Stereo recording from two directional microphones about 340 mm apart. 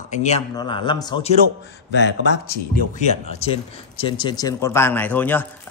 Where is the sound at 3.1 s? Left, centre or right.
Centre.